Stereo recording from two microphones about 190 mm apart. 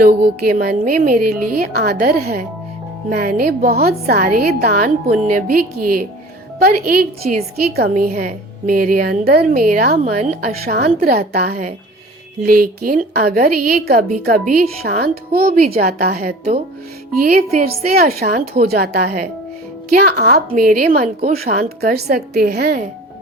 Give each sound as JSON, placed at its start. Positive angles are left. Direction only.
{"t": 0.0, "sound": "a woman's voice", "side_deg": -55}
{"t": 17.6, "sound": "a woman's voice", "side_deg": -50}